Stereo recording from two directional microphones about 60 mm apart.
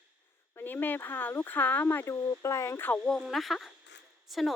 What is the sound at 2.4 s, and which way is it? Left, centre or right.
Speech, left.